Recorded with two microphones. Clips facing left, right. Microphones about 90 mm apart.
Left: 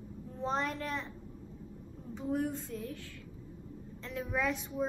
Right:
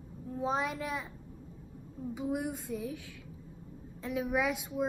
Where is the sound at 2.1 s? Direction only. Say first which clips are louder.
Left 1 dB; 10° right (ahead or behind).